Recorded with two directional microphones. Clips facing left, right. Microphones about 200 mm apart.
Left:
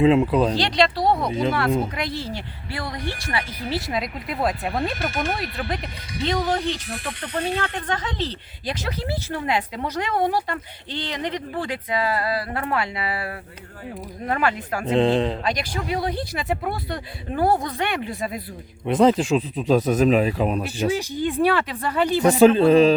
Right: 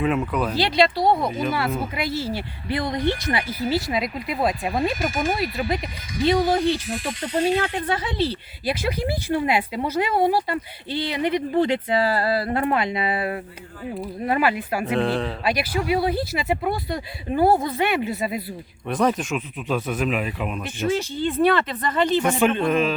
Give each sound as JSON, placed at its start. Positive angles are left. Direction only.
{"t": 0.0, "sound": "speech", "side_deg": 25}
{"t": 0.5, "sound": "speech", "side_deg": -5}
{"t": 1.3, "sound": "speech", "side_deg": 25}
{"t": 2.0, "sound": "speech", "side_deg": -5}
{"t": 2.6, "sound": "speech", "side_deg": -20}
{"t": 3.6, "sound": "speech", "side_deg": 0}
{"t": 11.6, "sound": "speech", "side_deg": -25}
{"t": 14.0, "sound": "speech", "side_deg": -10}
{"t": 14.9, "sound": "speech", "side_deg": 20}
{"t": 15.4, "sound": "speech", "side_deg": -10}
{"t": 18.9, "sound": "speech", "side_deg": 25}
{"t": 20.8, "sound": "speech", "side_deg": 15}
{"t": 22.2, "sound": "speech", "side_deg": 35}